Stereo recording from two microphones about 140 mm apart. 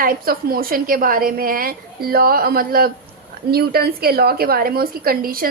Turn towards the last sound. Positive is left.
turn(degrees=-90)